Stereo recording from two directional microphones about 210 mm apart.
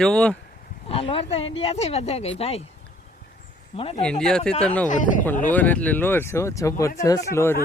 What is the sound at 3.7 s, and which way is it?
Speech, 25° left (ahead or behind).